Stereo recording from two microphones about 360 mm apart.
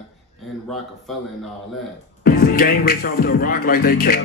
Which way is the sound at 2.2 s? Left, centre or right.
Left.